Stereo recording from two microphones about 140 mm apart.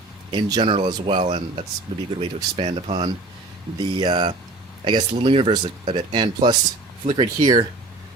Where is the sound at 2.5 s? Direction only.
45° right (ahead or behind).